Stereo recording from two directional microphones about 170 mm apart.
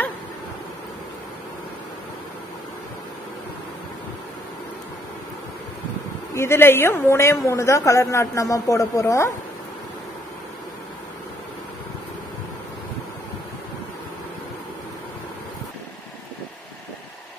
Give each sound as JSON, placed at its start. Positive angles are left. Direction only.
{"t": 6.3, "sound": "a woman's voice", "side_deg": 15}